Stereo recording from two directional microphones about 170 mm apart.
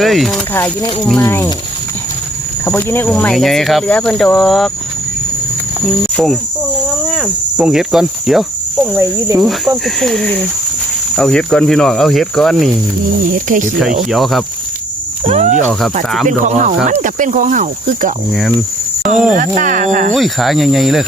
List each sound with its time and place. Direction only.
0.0 s speech: centre (ahead or behind)
1.2 s speech: 15° left (ahead or behind)
2.6 s speech: 10° left (ahead or behind)
7.1 s cricket: 5° right (ahead or behind)
8.8 s speech: 15° right (ahead or behind)
9.4 s speech: centre (ahead or behind)
13.2 s speech: 50° right (ahead or behind)
13.7 s speech: centre (ahead or behind)
15.2 s speech: 40° right (ahead or behind)
19.5 s speech: 50° right (ahead or behind)
20.1 s speech: centre (ahead or behind)